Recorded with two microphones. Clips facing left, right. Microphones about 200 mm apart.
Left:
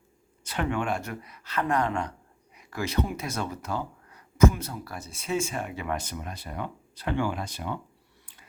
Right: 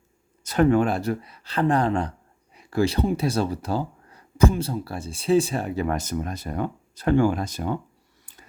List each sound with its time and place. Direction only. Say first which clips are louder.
0.4 s speech: right 10 dB; 40° right (ahead or behind)